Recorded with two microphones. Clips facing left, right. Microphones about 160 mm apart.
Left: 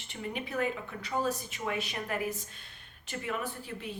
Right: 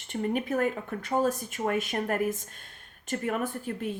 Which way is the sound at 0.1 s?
45° right (ahead or behind).